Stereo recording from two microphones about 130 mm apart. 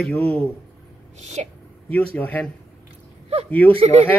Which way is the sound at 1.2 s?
60° right (ahead or behind).